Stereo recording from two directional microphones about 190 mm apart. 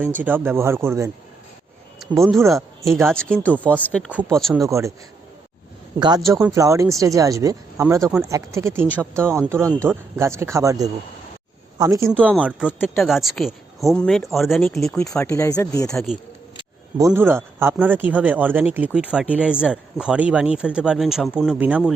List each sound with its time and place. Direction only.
0.0 s speech: 10° right (ahead or behind)
2.6 s speech: 15° right (ahead or behind)
3.1 s speech: 5° left (ahead or behind)
4.1 s speech: 10° right (ahead or behind)
6.0 s speech: 20° right (ahead or behind); by 14.9 s centre (ahead or behind)
15.2 s speech: 15° left (ahead or behind)
15.9 s speech: centre (ahead or behind)
17.1 s speech: 10° right (ahead or behind)